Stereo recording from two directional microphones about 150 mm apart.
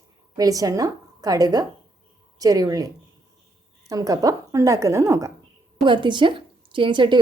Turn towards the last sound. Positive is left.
turn(degrees=-30)  # may be behind; listen again after turning